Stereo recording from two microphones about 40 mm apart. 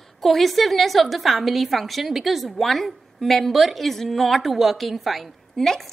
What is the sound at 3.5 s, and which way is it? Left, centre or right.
Speech, centre.